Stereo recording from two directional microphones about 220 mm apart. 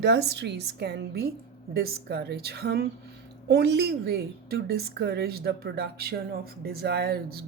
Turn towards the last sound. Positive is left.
turn(degrees=-45)  # may be behind; listen again after turning